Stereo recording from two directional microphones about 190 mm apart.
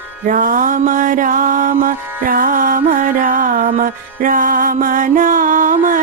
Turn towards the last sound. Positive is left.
turn(degrees=-45)  # may be behind; listen again after turning